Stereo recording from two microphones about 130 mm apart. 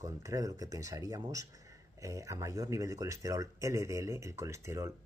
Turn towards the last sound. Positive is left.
turn(degrees=-20)  # may be behind; listen again after turning